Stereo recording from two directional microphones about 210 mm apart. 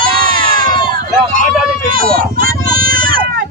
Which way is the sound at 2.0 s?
45° right (ahead or behind).